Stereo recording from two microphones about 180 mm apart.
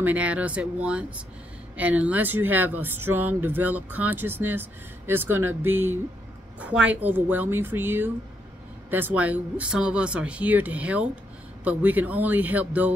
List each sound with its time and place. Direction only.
0.0 s speech: 10° right (ahead or behind)
5.5 s speech: 90° right
6.9 s speech: 10° right (ahead or behind)